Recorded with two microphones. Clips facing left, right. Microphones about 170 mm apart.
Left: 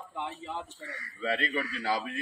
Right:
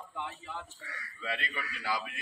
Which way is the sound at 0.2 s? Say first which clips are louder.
Left 5 dB; 20° left (ahead or behind).